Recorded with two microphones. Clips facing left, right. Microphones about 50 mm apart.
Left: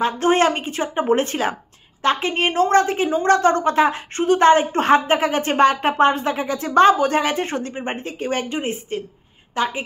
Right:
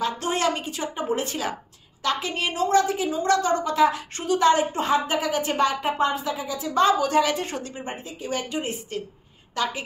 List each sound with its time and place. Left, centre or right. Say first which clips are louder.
0.0 s a woman's voice: left 7 dB; left
7.9 s a woman's voice: left 5 dB; left